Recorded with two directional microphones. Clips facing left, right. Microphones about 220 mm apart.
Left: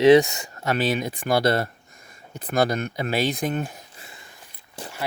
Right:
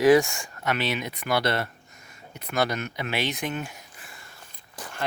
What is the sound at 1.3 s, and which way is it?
Speech, 45° left (ahead or behind).